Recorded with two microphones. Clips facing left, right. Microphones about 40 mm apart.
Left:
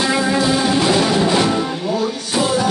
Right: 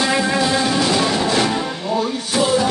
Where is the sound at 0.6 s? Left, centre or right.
Centre.